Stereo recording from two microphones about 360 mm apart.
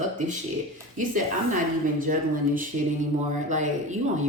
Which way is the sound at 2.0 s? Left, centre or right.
Right.